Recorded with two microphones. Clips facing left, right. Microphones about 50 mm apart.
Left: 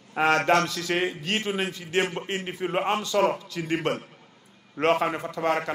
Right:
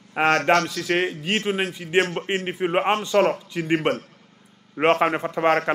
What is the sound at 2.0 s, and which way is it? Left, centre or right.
Speech, centre.